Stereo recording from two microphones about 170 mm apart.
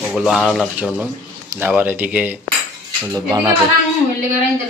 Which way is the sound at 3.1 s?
20° right (ahead or behind).